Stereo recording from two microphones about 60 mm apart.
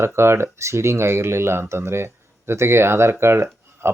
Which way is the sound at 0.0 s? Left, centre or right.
Right.